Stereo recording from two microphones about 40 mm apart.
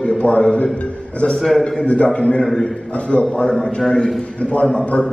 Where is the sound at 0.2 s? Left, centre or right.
Left.